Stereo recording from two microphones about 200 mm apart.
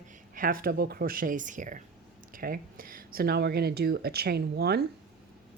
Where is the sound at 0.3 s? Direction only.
45° right (ahead or behind).